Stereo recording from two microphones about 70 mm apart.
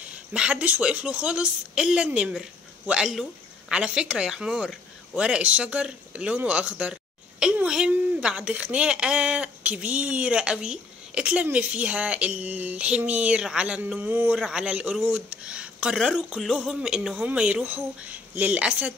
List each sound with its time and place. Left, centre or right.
0.0 s speech: centre
3.1 s a sound: centre
3.7 s speech: centre
14.3 s speech: centre
16.3 s speech: centre